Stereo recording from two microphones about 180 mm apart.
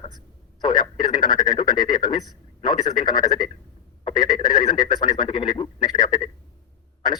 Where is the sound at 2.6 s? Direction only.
25° left (ahead or behind).